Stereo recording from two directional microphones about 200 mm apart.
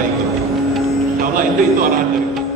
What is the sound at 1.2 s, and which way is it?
Speech, 45° right (ahead or behind).